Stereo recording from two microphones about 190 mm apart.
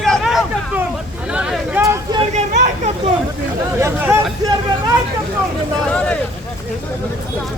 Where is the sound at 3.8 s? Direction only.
15° right (ahead or behind).